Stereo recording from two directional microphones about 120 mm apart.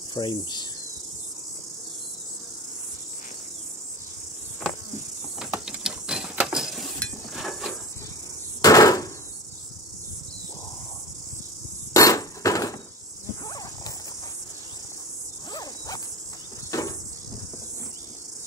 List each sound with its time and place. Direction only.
0.1 s cricket: 40° left (ahead or behind)
5.4 s a sound: 5° right (ahead or behind)
8.5 s hammer: 30° left (ahead or behind)
11.9 s hammer: 30° left (ahead or behind)
13.5 s horse: 30° left (ahead or behind)
15.5 s zipper: 35° left (ahead or behind)
16.7 s a sound: 25° left (ahead or behind)